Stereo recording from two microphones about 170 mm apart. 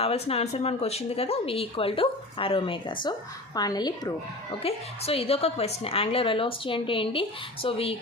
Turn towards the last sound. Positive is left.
turn(degrees=35)  # may be behind; listen again after turning